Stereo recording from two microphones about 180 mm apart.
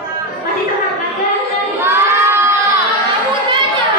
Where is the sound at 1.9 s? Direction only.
15° right (ahead or behind).